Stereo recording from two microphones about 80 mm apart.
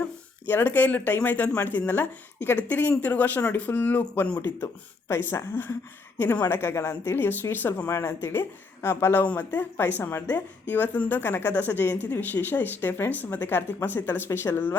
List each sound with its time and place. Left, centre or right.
0.4 s speech: left
9.2 s speech: centre